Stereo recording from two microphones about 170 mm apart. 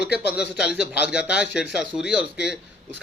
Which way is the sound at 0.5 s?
5° right (ahead or behind).